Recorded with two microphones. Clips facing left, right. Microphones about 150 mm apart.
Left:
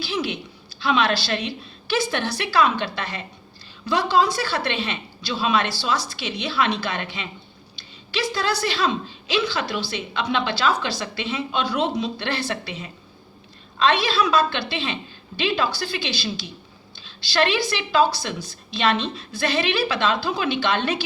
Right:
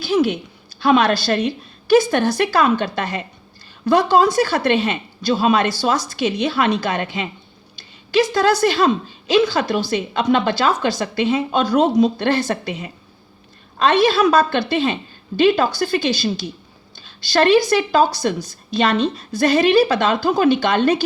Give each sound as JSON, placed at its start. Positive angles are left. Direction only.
{"t": 0.0, "sound": "a woman's voice", "side_deg": -45}